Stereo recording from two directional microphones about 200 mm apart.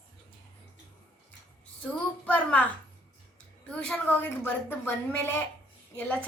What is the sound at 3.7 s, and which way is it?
A woman's voice, 5° left (ahead or behind).